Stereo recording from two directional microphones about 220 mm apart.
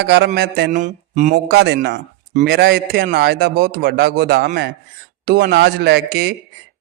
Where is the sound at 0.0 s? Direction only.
50° right (ahead or behind).